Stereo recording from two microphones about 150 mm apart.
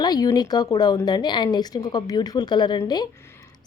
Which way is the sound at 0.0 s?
25° left (ahead or behind).